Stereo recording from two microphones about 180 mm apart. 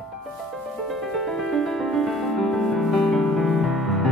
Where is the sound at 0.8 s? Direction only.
Centre (ahead or behind).